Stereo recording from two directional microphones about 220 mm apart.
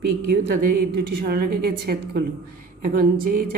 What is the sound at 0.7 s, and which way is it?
A woman's voice, 50° right (ahead or behind).